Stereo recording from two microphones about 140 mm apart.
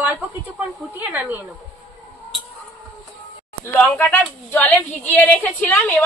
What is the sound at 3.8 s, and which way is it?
A woman's voice, 10° left (ahead or behind).